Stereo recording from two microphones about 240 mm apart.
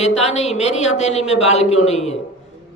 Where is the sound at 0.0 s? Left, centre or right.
Left.